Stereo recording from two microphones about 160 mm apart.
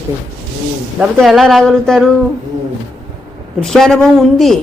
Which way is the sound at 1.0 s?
Centre (ahead or behind).